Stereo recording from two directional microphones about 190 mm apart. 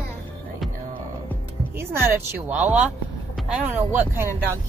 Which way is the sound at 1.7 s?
10° right (ahead or behind).